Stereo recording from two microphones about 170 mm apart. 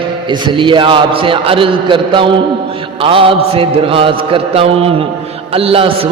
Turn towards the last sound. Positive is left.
turn(degrees=-35)  # may be behind; listen again after turning